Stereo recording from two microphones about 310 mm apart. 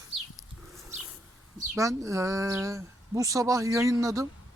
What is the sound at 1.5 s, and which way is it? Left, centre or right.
Speech, centre.